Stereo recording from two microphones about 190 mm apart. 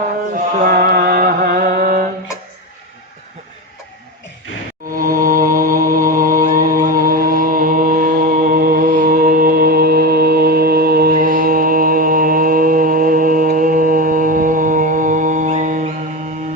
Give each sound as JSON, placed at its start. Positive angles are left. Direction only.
{"t": 0.3, "sound": "music", "side_deg": -55}
{"t": 4.9, "sound": "mantra", "side_deg": -50}